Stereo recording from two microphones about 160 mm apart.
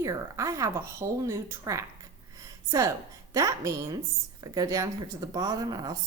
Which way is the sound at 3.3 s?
20° right (ahead or behind).